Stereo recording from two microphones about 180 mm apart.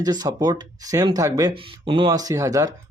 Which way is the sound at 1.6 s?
30° right (ahead or behind).